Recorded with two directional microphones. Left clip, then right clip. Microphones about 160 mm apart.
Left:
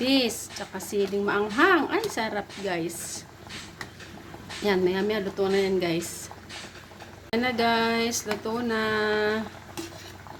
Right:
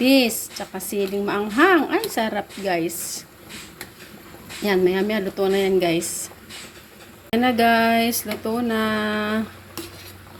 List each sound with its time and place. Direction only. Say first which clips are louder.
0.0 s a woman's voice: right 7 dB; 20° right (ahead or behind)
4.6 s a woman's voice: right 5 dB; 20° right (ahead or behind)
7.3 s a woman's voice: right 6 dB; 20° right (ahead or behind)